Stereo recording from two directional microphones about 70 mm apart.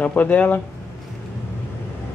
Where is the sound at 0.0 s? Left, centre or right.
Left.